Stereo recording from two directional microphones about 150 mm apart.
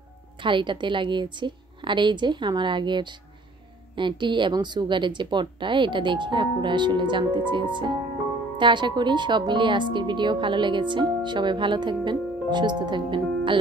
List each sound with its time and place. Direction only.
0.4 s speech: 30° right (ahead or behind)